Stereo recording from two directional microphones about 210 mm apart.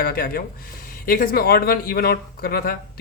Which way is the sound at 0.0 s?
45° left (ahead or behind).